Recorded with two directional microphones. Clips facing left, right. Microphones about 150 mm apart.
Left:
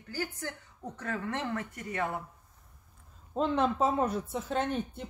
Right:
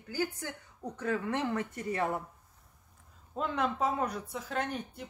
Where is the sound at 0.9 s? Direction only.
10° right (ahead or behind).